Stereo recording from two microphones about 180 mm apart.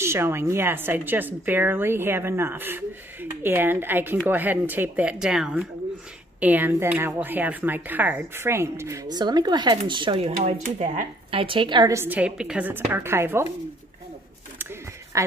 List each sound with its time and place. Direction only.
0.0 s speech: 15° right (ahead or behind); by 11.4 s 40° right (ahead or behind)
11.4 s speech: 30° right (ahead or behind)
15.1 s a sound: 15° right (ahead or behind)